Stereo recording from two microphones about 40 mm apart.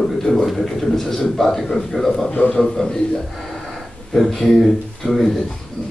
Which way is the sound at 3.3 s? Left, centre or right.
Centre.